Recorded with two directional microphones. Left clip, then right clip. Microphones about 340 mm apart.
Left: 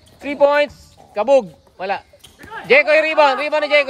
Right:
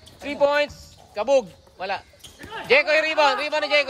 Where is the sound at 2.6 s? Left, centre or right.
Left.